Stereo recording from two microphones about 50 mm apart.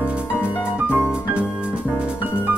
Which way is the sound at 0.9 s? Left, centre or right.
Right.